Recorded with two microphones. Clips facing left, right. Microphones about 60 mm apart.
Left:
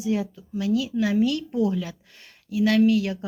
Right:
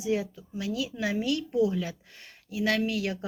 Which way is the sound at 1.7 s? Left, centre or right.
Right.